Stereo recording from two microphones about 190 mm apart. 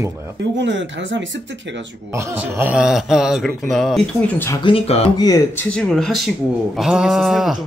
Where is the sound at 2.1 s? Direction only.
15° right (ahead or behind); by 4.6 s 10° left (ahead or behind).